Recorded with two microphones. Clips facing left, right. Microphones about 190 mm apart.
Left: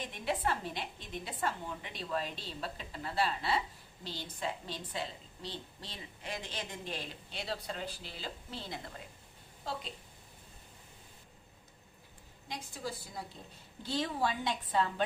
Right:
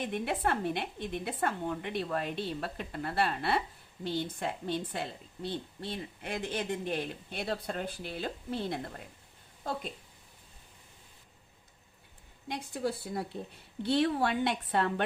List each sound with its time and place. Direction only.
0.0 s a woman's voice: 55° right (ahead or behind)
12.5 s a woman's voice: 60° right (ahead or behind)